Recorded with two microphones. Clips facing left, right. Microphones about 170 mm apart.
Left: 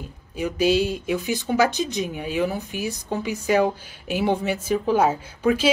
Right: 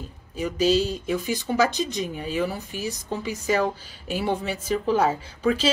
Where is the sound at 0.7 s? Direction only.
60° left (ahead or behind).